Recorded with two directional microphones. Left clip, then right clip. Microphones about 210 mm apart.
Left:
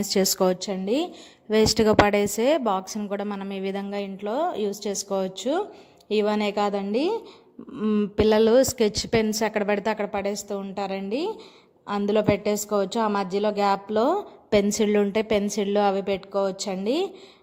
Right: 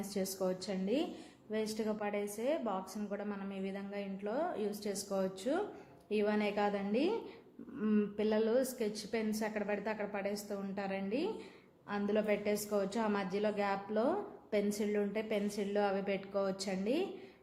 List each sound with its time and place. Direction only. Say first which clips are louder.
0.1 s a woman's voice: left 15 dB; 45° left (ahead or behind)